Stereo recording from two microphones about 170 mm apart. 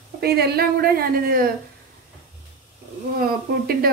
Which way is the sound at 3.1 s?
60° right (ahead or behind).